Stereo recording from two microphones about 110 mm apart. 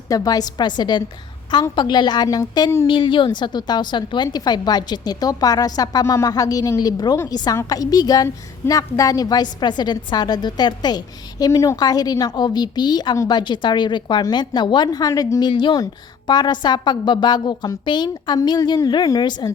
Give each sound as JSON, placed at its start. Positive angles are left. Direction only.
{"t": 0.1, "sound": "a woman's voice", "side_deg": 35}
{"t": 2.8, "sound": "a woman's voice", "side_deg": 50}